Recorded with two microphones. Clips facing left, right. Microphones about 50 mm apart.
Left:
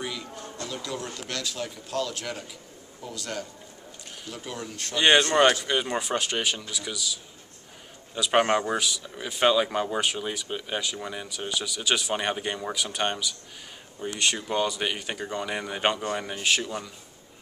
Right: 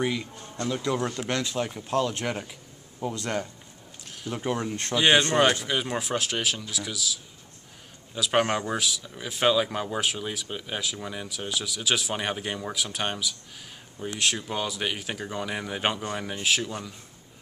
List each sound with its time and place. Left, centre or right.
0.0 s speech: right
4.9 s speech: centre